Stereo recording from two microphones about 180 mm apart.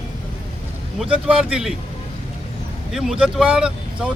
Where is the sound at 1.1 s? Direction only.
5° right (ahead or behind).